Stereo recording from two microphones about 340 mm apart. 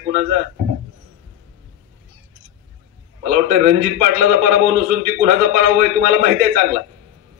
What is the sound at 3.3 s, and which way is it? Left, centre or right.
A man's voice, right.